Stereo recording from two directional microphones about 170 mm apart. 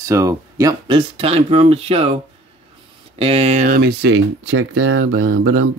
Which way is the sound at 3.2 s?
40° right (ahead or behind).